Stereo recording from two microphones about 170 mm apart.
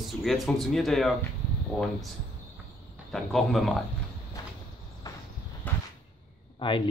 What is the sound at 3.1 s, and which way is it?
Speech, centre (ahead or behind).